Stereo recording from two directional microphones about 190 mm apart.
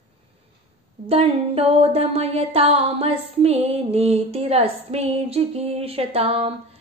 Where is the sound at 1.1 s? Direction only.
30° right (ahead or behind).